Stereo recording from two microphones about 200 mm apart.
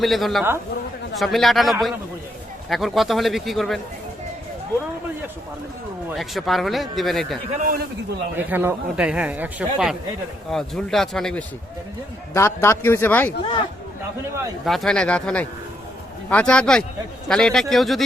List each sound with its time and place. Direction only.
0.0 s a man's voice: centre (ahead or behind)
6.1 s a man's voice: centre (ahead or behind)
7.6 s a man's voice: 45° right (ahead or behind)
8.4 s a man's voice: 10° right (ahead or behind)
12.3 s a man's voice: 15° left (ahead or behind)
14.6 s a man's voice: centre (ahead or behind)